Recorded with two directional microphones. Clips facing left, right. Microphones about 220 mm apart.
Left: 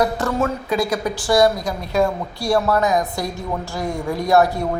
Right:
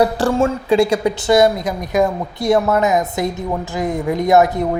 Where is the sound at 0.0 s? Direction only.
30° right (ahead or behind).